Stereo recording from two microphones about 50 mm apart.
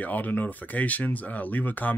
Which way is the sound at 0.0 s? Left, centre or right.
Left.